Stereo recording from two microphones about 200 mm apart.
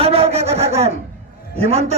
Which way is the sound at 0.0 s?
30° right (ahead or behind).